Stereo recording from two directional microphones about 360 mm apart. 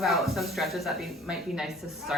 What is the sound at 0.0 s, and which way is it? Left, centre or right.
A woman's voice, centre.